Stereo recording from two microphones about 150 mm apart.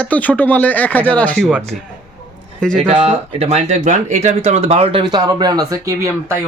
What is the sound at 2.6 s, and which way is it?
Speech, 5° left (ahead or behind).